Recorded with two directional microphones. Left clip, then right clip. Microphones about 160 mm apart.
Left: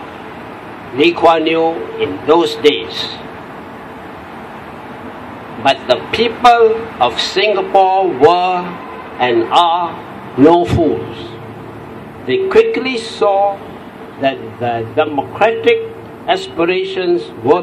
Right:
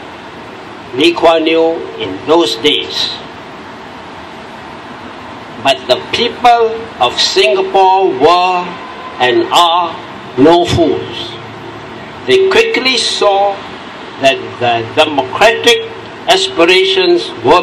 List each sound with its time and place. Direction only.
0.9 s a man's voice: 20° left (ahead or behind)
5.6 s a man's voice: 20° left (ahead or behind)
12.3 s a man's voice: 20° left (ahead or behind)